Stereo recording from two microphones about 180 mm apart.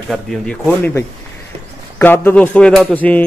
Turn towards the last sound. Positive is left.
turn(degrees=10)  # may be behind; listen again after turning